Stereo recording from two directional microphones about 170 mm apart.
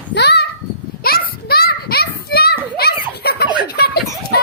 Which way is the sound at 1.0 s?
60° left (ahead or behind).